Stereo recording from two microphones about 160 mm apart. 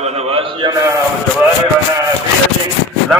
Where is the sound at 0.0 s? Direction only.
35° right (ahead or behind).